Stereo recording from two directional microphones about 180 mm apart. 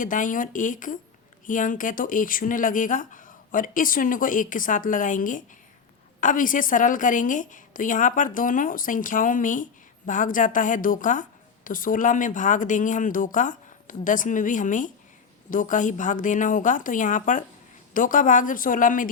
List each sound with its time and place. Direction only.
0.0 s a woman's voice: 45° left (ahead or behind)